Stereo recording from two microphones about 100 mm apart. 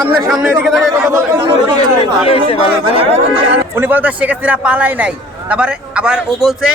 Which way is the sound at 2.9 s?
80° right.